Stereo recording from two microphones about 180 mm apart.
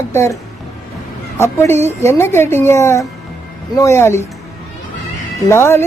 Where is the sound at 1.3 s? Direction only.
15° left (ahead or behind).